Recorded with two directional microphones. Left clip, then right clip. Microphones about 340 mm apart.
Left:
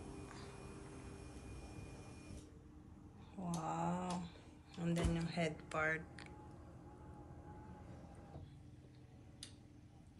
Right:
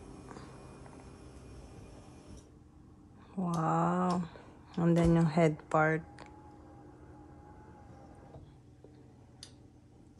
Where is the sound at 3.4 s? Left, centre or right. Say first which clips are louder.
Right 11 dB; right.